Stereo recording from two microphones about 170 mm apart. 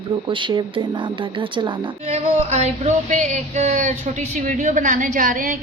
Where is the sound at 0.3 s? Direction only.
30° right (ahead or behind).